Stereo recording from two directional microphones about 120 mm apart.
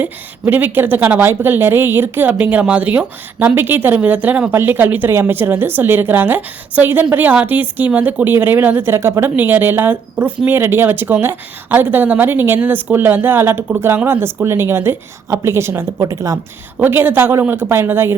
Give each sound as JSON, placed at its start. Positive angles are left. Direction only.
{"t": 0.0, "sound": "a woman's voice", "side_deg": -15}
{"t": 16.7, "sound": "speech", "side_deg": -15}